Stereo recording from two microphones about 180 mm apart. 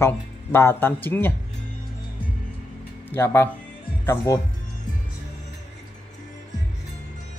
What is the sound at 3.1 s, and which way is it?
Speech, 15° left (ahead or behind).